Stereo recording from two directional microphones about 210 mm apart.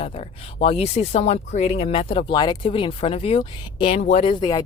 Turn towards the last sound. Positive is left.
turn(degrees=30)  # may be behind; listen again after turning